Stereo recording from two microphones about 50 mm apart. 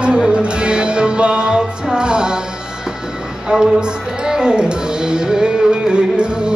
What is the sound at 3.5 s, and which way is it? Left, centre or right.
Music, centre.